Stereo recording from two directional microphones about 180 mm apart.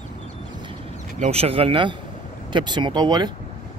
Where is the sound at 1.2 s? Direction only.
35° right (ahead or behind).